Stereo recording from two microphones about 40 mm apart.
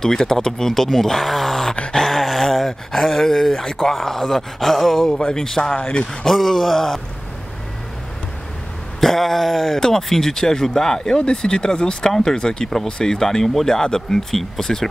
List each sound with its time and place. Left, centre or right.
0.0 s speech: centre
2.0 s a sound: centre
3.9 s speech: centre
5.8 s speech: left
6.2 s speech: centre
9.0 s speech: centre
9.8 s speech: centre